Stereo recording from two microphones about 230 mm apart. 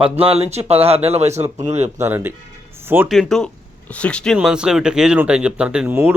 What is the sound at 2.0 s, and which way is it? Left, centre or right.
Speech, centre.